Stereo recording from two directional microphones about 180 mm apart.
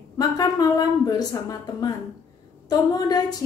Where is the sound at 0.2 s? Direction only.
20° left (ahead or behind).